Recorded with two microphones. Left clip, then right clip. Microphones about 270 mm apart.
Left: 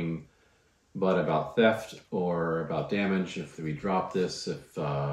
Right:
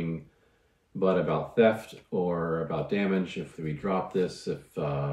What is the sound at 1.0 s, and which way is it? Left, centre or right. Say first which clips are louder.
Speech: even; centre.